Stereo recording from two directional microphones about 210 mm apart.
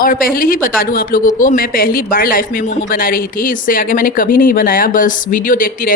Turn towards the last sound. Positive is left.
turn(degrees=40)  # may be behind; listen again after turning